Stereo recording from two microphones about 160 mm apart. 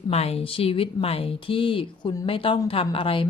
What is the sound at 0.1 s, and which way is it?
Speech, 40° left (ahead or behind).